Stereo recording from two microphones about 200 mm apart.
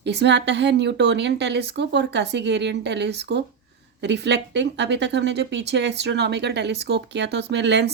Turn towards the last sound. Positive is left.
turn(degrees=-60)  # may be behind; listen again after turning